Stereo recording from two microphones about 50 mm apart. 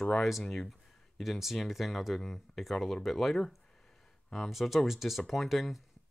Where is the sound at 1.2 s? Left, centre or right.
Centre.